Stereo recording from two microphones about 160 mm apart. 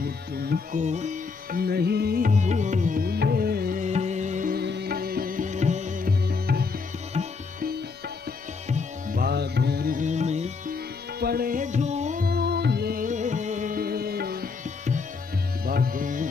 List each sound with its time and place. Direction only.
0.0 s music: 75° right (ahead or behind)
0.7 s music: 45° right (ahead or behind)
1.6 s music: 80° right
3.8 s music: 45° right (ahead or behind)
4.6 s music: 90° right; by 6.1 s 55° right (ahead or behind)
6.2 s music: 75° right (ahead or behind)
7.2 s sitar: 40° right (ahead or behind)
8.6 s music: 45° right (ahead or behind)
9.2 s music: 90° right; by 10.5 s 45° right (ahead or behind)
10.7 s music: 70° right (ahead or behind); by 12.3 s 50° right (ahead or behind)
12.3 s music: 90° right; by 14.5 s 70° right (ahead or behind)
15.6 s music: 70° right (ahead or behind)